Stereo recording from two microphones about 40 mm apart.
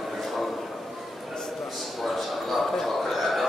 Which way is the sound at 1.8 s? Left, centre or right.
Centre.